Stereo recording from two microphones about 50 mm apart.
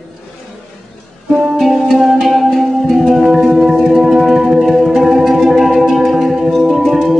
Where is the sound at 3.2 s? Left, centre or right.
Centre.